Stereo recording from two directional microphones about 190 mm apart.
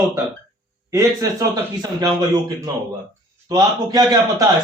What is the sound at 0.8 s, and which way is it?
A man's voice, 15° right (ahead or behind).